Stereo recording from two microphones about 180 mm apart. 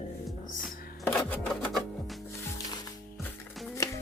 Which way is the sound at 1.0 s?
10° left (ahead or behind).